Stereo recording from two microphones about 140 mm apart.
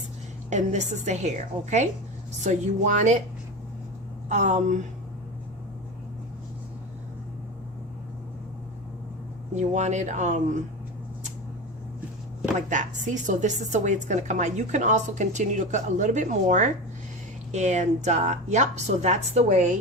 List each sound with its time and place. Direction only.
0.5 s a woman's voice: 55° right (ahead or behind)
4.3 s a woman's voice: 60° right (ahead or behind)
9.6 s a woman's voice: 60° right (ahead or behind)
12.5 s a woman's voice: 60° right (ahead or behind)